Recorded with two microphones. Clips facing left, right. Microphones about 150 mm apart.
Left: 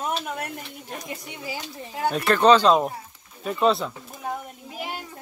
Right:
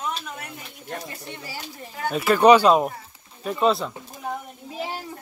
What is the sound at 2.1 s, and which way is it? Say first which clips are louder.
Speech: right 2 dB; 5° right (ahead or behind).